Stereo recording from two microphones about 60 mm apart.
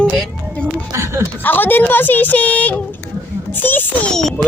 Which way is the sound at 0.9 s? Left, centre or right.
Right.